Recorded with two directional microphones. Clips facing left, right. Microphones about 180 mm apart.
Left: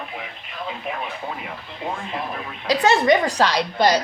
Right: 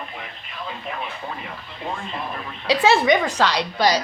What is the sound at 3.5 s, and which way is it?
Speech, 55° left (ahead or behind).